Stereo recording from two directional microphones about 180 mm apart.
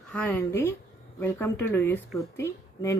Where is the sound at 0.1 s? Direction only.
10° left (ahead or behind).